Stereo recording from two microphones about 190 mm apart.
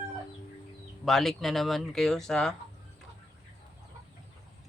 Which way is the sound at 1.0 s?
Centre (ahead or behind).